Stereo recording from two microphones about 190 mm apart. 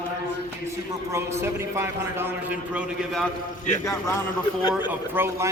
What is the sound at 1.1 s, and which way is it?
A man's voice, 15° right (ahead or behind).